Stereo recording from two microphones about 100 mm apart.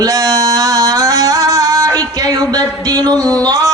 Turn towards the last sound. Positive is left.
turn(degrees=-40)  # may be behind; listen again after turning